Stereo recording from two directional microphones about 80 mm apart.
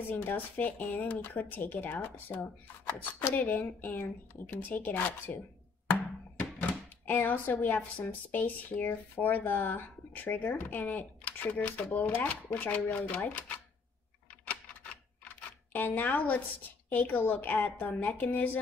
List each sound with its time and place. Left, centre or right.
0.1 s speech: left
5.9 s a sound: centre
8.8 s speech: left
14.4 s typewriter: centre
16.9 s speech: centre